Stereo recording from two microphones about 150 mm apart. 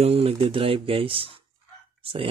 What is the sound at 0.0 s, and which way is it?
Speech, 40° right (ahead or behind).